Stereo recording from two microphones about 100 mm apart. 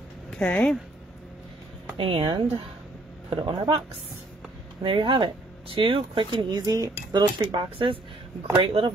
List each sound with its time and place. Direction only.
0.4 s speech: 10° left (ahead or behind)
2.0 s speech: 60° right (ahead or behind)
4.8 s speech: 60° right (ahead or behind)
6.6 s speech: 40° right (ahead or behind); by 8.9 s 65° right (ahead or behind)